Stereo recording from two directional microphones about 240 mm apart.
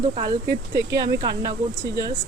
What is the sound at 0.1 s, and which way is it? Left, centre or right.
Speech, centre.